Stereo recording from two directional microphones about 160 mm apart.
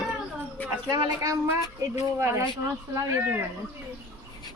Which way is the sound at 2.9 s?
20° right (ahead or behind).